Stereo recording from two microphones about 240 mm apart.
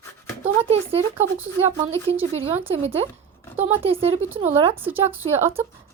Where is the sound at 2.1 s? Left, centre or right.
Right.